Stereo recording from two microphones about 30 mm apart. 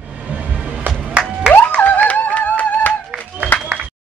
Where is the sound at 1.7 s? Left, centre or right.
Left.